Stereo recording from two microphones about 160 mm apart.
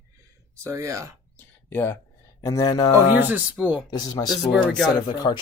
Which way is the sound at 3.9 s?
25° left (ahead or behind).